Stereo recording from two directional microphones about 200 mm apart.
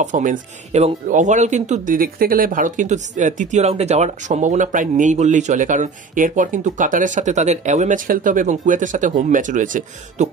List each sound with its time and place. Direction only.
0.0 s speech: 40° right (ahead or behind)